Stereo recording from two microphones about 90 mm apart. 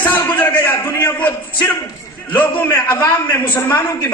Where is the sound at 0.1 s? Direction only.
20° left (ahead or behind).